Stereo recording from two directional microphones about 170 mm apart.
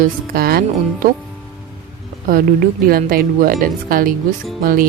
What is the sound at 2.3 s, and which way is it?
Speech, 55° right (ahead or behind).